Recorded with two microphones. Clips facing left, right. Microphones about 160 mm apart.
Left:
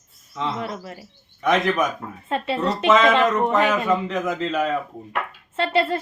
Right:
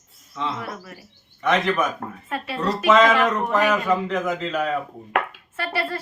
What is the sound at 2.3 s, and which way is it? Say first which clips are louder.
Speech: left 3 dB; 25° left (ahead or behind).